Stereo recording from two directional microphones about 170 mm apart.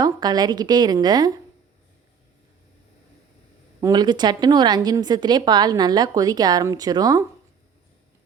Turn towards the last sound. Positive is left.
turn(degrees=-20)  # may be behind; listen again after turning